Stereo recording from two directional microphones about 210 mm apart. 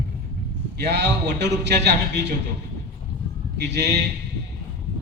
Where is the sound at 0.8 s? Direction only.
55° right (ahead or behind).